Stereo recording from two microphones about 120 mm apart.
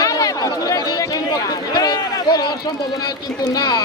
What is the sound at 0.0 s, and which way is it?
Chatter, 30° left (ahead or behind).